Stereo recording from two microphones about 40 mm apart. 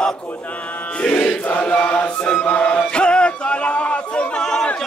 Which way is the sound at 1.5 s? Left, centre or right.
Left.